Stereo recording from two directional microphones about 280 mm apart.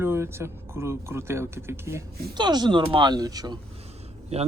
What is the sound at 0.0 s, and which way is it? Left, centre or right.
Speech, centre.